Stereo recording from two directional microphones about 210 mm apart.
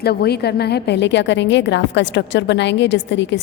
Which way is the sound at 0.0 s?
50° left (ahead or behind).